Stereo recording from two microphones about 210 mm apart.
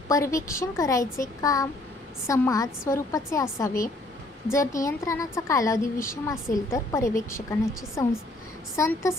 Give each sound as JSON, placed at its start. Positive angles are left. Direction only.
{"t": 0.1, "sound": "a woman's voice", "side_deg": 15}